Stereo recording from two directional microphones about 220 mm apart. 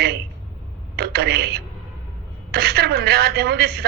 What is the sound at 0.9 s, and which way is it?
A man's voice, 45° right (ahead or behind).